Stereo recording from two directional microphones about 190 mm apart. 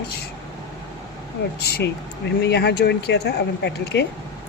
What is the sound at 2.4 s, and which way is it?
Speech, 60° left (ahead or behind).